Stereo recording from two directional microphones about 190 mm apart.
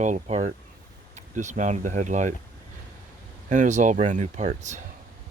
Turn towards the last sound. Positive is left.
turn(degrees=-40)  # may be behind; listen again after turning